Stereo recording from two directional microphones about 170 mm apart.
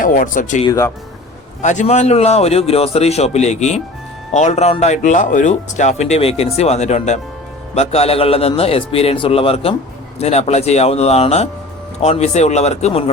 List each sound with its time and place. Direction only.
0.0 s speech: 50° left (ahead or behind)
0.7 s speech: 20° left (ahead or behind)
1.6 s speech: 45° left (ahead or behind)